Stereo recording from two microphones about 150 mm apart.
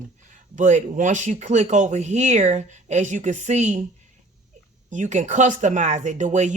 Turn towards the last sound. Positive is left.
turn(degrees=-55)  # may be behind; listen again after turning